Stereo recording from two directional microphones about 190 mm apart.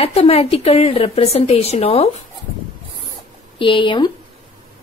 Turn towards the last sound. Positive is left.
turn(degrees=25)  # may be behind; listen again after turning